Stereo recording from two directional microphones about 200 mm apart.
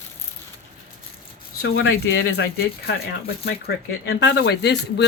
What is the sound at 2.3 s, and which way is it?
Speech, 50° left (ahead or behind).